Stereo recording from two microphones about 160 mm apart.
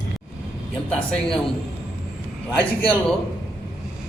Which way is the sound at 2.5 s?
10° left (ahead or behind).